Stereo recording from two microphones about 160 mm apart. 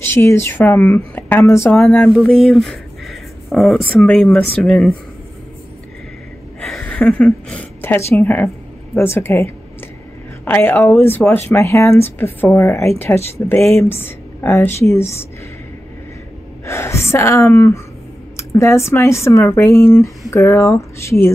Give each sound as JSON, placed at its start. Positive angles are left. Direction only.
{"t": 0.0, "sound": "speech", "side_deg": 15}
{"t": 6.8, "sound": "a woman's voice", "side_deg": 10}
{"t": 16.6, "sound": "speech", "side_deg": 15}